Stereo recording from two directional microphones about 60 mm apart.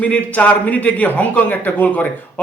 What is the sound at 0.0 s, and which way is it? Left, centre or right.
A man's voice, left.